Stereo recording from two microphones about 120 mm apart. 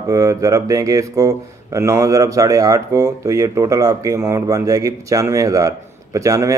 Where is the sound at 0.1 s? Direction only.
25° right (ahead or behind).